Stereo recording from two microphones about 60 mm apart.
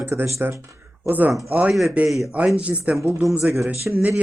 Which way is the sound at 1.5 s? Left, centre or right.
Right.